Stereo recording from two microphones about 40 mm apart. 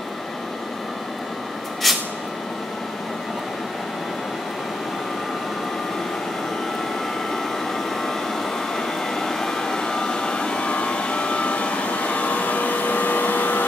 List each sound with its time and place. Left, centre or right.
1.8 s vehicle: centre
8.7 s vacuum cleaner: centre; by 13.7 s left